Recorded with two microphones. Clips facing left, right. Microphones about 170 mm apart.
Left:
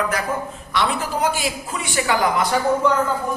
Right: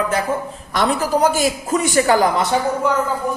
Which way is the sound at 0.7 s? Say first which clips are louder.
Right 5 dB; 40° right (ahead or behind).